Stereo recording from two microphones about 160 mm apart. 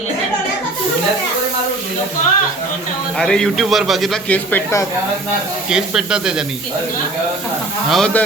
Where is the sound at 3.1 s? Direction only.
5° left (ahead or behind).